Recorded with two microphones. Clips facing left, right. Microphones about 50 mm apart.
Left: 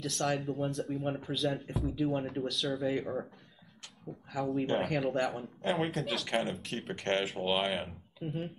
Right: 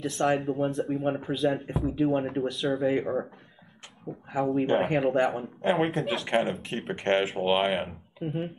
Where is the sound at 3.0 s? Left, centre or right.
Right.